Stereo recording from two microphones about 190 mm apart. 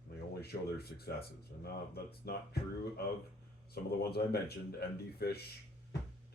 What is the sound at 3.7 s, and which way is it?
Speech, 55° left (ahead or behind).